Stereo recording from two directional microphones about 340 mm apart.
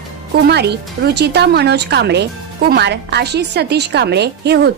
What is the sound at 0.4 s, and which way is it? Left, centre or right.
A woman's voice, right.